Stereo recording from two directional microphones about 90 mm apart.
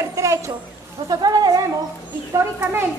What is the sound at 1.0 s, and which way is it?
Speech, 50° right (ahead or behind).